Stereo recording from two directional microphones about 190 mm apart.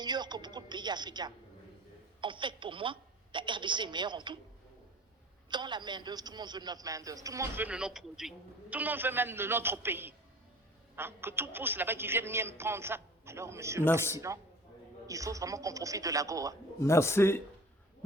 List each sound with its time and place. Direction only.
0.0 s a man's voice: 20° right (ahead or behind)
5.5 s a man's voice: 25° right (ahead or behind)
16.8 s a man's voice: 15° left (ahead or behind)